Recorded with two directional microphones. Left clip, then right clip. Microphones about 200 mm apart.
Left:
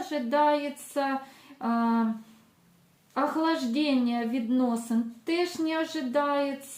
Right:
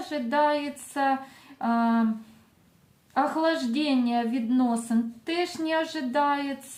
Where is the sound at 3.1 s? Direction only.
35° right (ahead or behind).